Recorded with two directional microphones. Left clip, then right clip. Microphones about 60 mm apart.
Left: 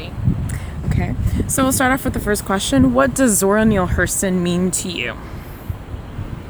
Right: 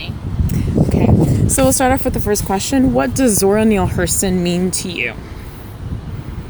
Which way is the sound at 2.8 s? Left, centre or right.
Centre.